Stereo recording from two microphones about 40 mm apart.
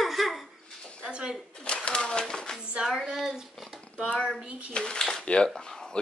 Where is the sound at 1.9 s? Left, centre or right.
Left.